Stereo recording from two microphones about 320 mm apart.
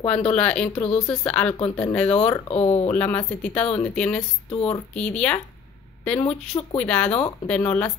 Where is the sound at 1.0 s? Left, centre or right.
Centre.